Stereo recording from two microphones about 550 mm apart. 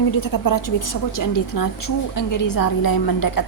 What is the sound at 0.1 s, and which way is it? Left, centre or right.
A woman's voice, left.